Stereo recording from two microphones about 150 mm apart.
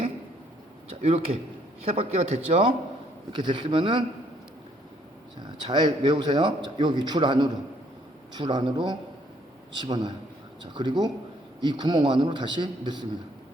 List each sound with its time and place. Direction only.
0.9 s a man's voice: 40° right (ahead or behind)
5.4 s a man's voice: 30° right (ahead or behind)